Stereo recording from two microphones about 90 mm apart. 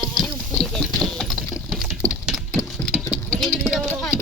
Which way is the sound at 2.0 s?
35° left (ahead or behind).